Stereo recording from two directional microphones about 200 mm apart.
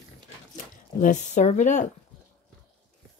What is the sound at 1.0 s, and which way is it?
Speech, 35° left (ahead or behind).